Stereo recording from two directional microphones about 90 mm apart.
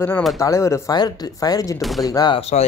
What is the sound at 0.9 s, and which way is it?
Speech, 50° left (ahead or behind).